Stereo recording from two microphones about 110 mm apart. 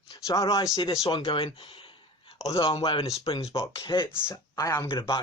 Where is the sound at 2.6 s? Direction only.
55° left (ahead or behind).